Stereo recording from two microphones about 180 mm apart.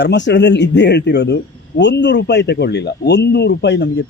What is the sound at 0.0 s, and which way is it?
Speech, 75° left (ahead or behind).